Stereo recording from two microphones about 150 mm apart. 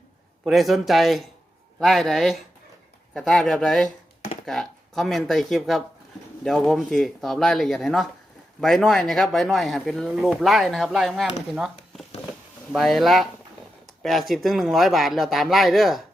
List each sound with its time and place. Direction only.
0.4 s speech: centre (ahead or behind)
11.5 s a sound: centre (ahead or behind)
12.7 s speech: centre (ahead or behind)